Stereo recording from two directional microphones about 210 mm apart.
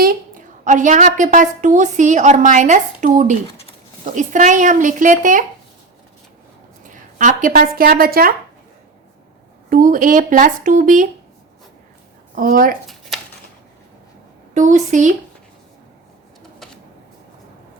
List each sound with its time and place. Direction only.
0.0 s a woman's voice: 40° right (ahead or behind)
7.2 s speech: 35° right (ahead or behind)
9.6 s a woman's voice: 40° right (ahead or behind)
12.3 s speech: 40° right (ahead or behind)
14.5 s a woman's voice: 35° right (ahead or behind)